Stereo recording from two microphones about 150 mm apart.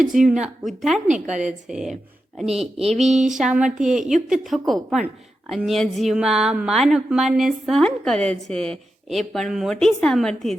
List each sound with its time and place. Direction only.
0.3 s a woman's voice: 5° right (ahead or behind)
2.5 s a sound: 40° right (ahead or behind)
3.2 s a woman's voice: 5° right (ahead or behind)